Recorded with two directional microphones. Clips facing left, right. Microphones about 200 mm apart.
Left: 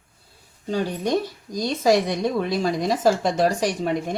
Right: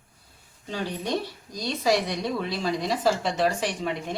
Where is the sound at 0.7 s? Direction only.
45° left (ahead or behind).